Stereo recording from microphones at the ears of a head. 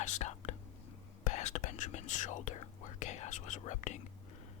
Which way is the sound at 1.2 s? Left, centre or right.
Left.